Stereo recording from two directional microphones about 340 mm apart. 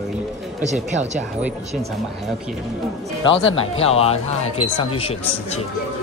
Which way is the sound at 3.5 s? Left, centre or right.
Centre.